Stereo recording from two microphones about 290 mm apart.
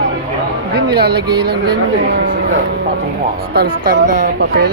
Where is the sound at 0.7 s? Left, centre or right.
Right.